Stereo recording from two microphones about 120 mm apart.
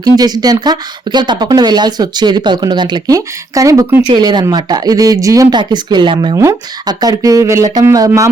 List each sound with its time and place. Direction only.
0.0 s speech: 35° right (ahead or behind)
6.3 s speech: 25° right (ahead or behind)